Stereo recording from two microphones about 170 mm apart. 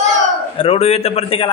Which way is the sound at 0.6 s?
35° left (ahead or behind).